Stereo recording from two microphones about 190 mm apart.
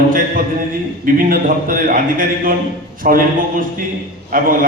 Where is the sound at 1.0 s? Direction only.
45° right (ahead or behind).